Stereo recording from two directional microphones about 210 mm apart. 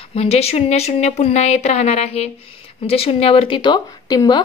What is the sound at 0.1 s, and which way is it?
A woman's voice, 30° left (ahead or behind).